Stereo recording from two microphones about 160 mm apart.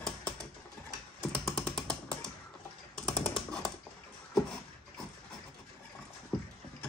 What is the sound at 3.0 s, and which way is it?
Computer keyboard, 5° left (ahead or behind).